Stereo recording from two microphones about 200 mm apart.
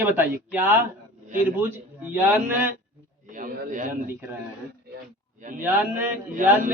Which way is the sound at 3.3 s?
40° right (ahead or behind).